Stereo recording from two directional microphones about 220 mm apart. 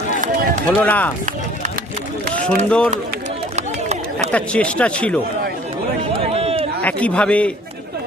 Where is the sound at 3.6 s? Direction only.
30° right (ahead or behind).